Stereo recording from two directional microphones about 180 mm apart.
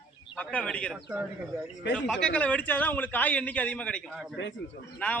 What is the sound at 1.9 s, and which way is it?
A man's voice, 5° left (ahead or behind).